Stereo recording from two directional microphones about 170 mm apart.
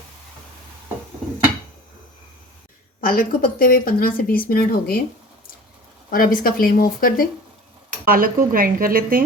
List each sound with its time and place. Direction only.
3.0 s speech: 60° left (ahead or behind)
6.1 s speech: 55° left (ahead or behind)
8.0 s speech: 55° right (ahead or behind)